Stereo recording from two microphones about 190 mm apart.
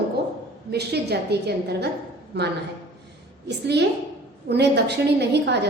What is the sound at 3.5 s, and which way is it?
A woman's voice, 65° right (ahead or behind).